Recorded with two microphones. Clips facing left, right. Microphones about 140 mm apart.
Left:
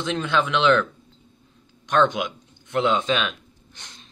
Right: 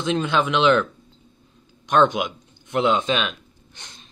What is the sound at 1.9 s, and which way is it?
Speech, 15° right (ahead or behind).